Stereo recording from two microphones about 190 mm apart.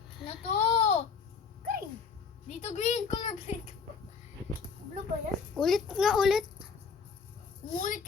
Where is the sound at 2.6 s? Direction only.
35° left (ahead or behind).